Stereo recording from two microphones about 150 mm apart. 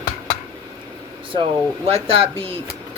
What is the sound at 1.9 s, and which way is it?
Speech, 40° right (ahead or behind).